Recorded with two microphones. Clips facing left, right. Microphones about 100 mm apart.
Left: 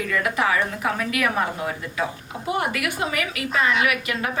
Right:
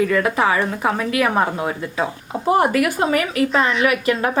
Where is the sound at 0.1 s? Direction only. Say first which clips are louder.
Right 5 dB; 30° right (ahead or behind).